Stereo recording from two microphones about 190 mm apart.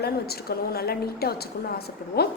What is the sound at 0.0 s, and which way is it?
A woman's voice, 55° left (ahead or behind).